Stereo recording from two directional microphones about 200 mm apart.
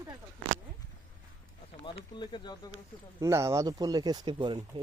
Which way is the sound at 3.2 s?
15° right (ahead or behind).